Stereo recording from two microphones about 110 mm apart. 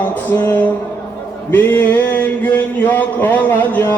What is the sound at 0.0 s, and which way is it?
Music, 15° left (ahead or behind).